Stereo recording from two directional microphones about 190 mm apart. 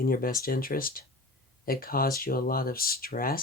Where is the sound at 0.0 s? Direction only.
50° left (ahead or behind).